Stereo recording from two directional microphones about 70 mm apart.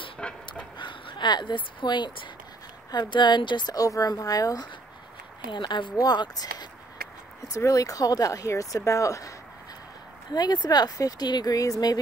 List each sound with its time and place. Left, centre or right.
0.2 s a sound: centre
0.7 s speech: left
3.8 s speech: left
5.5 s speech: left
7.4 s speech: left
10.3 s speech: left
11.0 s speech: left